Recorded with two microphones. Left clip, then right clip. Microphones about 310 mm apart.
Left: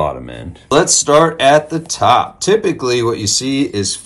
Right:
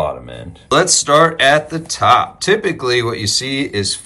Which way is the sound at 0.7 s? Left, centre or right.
Centre.